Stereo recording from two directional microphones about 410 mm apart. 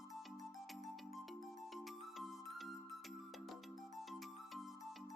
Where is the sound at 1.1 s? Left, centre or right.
Centre.